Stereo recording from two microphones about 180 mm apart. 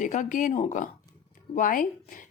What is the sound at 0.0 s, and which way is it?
Speech, 45° left (ahead or behind).